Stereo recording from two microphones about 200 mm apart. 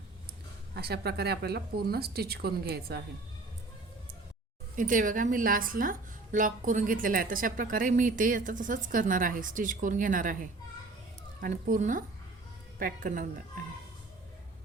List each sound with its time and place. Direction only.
0.8 s a woman's voice: 55° right (ahead or behind)
4.8 s a woman's voice: 40° right (ahead or behind)